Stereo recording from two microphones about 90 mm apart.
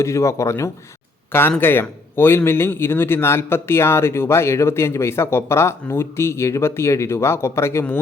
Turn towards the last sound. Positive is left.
turn(degrees=30)  # may be behind; listen again after turning